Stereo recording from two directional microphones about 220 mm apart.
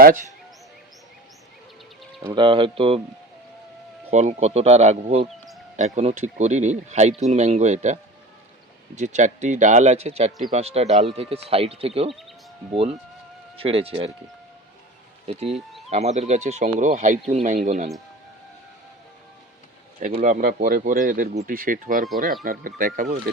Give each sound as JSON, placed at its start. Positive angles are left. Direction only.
{"t": 0.0, "sound": "speech", "side_deg": -40}
{"t": 2.2, "sound": "speech", "side_deg": -20}
{"t": 4.1, "sound": "speech", "side_deg": -30}
{"t": 9.0, "sound": "speech", "side_deg": -35}
{"t": 13.6, "sound": "speech", "side_deg": -25}
{"t": 15.3, "sound": "speech", "side_deg": -25}
{"t": 20.0, "sound": "speech", "side_deg": -35}